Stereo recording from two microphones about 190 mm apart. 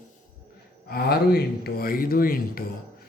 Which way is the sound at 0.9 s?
55° left (ahead or behind).